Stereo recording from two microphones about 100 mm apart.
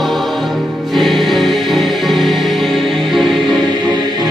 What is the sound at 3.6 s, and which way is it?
Music, 50° right (ahead or behind).